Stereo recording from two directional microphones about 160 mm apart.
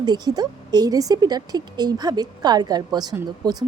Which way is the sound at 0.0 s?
25° right (ahead or behind).